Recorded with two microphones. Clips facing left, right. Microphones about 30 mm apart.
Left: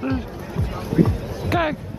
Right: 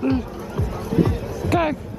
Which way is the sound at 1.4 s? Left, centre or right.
Centre.